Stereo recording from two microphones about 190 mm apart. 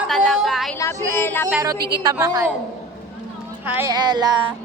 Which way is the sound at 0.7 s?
15° left (ahead or behind).